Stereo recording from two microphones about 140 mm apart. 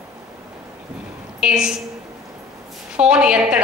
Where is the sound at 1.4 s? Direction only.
5° right (ahead or behind).